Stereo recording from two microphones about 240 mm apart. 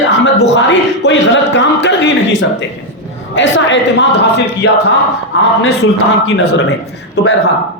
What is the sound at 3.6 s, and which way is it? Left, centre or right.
A man's voice, left.